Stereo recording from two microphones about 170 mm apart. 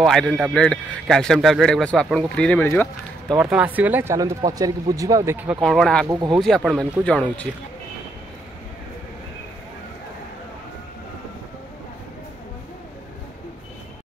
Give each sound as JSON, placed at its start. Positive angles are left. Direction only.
{"t": 0.0, "sound": "a man's voice", "side_deg": 5}
{"t": 3.3, "sound": "speech", "side_deg": -5}
{"t": 5.6, "sound": "a man's voice", "side_deg": 0}
{"t": 6.0, "sound": "speech", "side_deg": -25}
{"t": 6.4, "sound": "a man's voice", "side_deg": 0}